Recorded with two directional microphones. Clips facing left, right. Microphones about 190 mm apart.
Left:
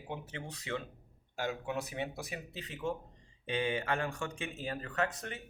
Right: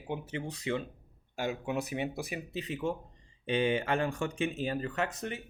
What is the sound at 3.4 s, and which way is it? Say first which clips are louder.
Speech: right 5 dB; 25° right (ahead or behind).